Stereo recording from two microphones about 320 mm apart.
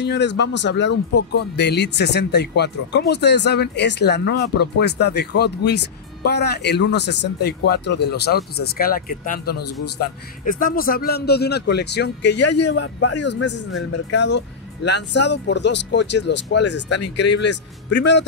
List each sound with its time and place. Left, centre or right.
0.0 s speech: left
13.4 s speech: left